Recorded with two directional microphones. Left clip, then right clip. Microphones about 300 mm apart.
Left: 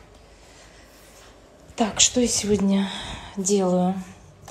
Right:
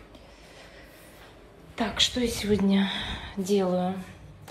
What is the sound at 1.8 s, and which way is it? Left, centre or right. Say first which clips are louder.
A woman's voice: left 5 dB; centre.